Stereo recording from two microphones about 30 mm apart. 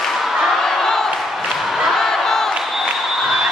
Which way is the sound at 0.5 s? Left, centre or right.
Centre.